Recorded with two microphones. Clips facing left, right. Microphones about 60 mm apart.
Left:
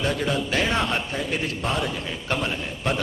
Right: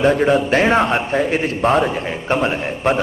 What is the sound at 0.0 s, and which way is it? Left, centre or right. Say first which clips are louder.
A man's voice: right 10 dB; right.